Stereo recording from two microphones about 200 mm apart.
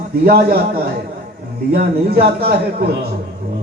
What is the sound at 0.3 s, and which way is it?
A man's voice, 50° right (ahead or behind).